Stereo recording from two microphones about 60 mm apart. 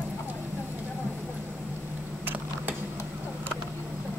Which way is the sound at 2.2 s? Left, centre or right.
Right.